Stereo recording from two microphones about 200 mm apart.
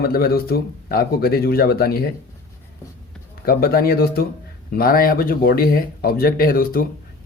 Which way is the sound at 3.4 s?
50° left (ahead or behind).